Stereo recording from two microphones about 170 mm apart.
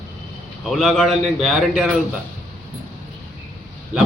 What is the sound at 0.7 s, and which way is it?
A man's voice, centre (ahead or behind).